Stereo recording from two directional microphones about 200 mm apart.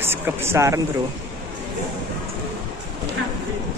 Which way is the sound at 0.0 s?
10° right (ahead or behind).